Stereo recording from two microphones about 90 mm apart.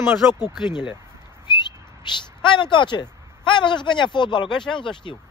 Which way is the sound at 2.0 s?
60° left (ahead or behind).